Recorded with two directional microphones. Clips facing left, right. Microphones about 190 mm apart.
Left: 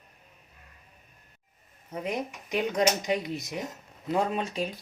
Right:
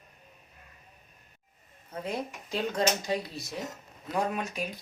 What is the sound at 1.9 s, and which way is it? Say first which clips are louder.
Speech: left 2 dB; 20° left (ahead or behind).